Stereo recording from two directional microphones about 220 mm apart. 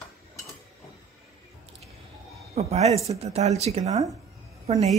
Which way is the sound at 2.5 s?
30° right (ahead or behind).